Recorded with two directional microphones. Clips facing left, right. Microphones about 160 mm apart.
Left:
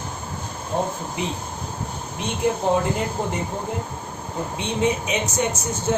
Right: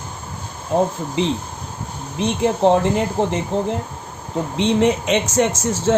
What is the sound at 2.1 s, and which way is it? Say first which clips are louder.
Speech: right 4 dB; 90° right.